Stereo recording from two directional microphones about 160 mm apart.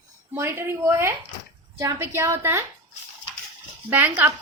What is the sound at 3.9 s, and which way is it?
Speech, 15° right (ahead or behind).